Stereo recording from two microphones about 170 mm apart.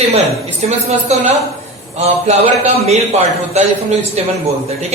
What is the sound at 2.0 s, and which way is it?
A man's voice, 40° right (ahead or behind).